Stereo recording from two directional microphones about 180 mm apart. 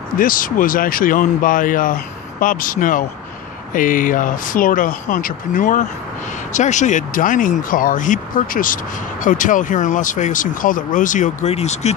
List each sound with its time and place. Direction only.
0.2 s speech: 50° left (ahead or behind)